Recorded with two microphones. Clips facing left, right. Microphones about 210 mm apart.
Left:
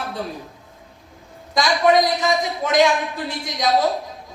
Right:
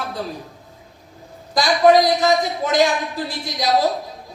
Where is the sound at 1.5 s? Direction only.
35° right (ahead or behind).